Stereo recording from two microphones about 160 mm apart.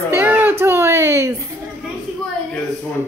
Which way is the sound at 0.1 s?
15° right (ahead or behind).